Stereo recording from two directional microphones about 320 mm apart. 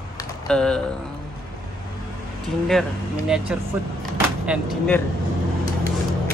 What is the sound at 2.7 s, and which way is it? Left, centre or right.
Speech, centre.